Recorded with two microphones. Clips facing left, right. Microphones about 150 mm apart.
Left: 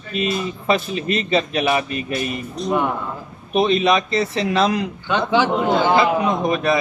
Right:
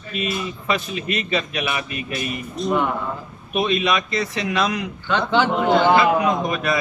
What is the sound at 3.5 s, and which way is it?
A man's voice, 30° left (ahead or behind).